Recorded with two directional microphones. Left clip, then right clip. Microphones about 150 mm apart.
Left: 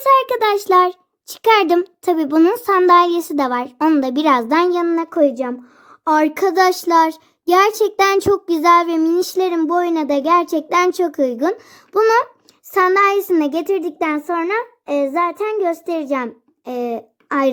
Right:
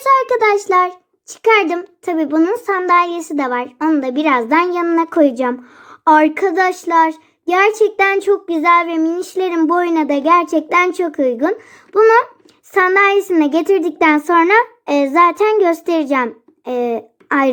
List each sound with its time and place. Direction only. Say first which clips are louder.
0.0 s a sound: right 1 dB; 40° left (ahead or behind)
0.7 s child singing: left 1 dB; 50° left (ahead or behind)
1.6 s a child's voice: left 4 dB; 65° left (ahead or behind)
4.4 s a woman's voice: right 1 dB; 45° left (ahead or behind)
6.2 s child singing: even; 50° left (ahead or behind)
8.2 s a child's voice: right 1 dB; 70° left (ahead or behind)
9.5 s a woman's voice: right 2 dB; 35° left (ahead or behind)
11.9 s child singing: right 4 dB; 50° left (ahead or behind)
12.7 s a child's voice: right 2 dB; 40° left (ahead or behind)